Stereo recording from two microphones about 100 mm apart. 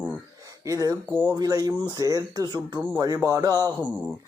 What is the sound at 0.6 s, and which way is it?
Speech, 35° right (ahead or behind).